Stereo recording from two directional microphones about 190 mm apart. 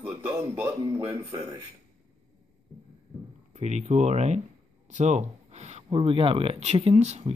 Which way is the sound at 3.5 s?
35° right (ahead or behind).